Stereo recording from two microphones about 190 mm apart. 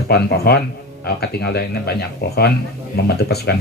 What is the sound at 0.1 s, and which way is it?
Speech, 55° left (ahead or behind).